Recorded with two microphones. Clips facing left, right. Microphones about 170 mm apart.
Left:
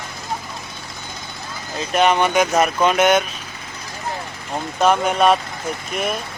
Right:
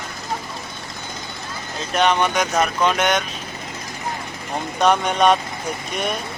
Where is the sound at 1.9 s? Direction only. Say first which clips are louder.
Left 3 dB; 5° left (ahead or behind).